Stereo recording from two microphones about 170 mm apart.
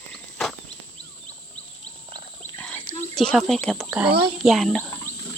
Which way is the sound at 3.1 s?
Centre (ahead or behind).